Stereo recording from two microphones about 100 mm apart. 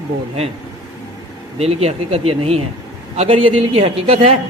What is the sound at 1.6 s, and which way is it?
A man's voice, 90° right.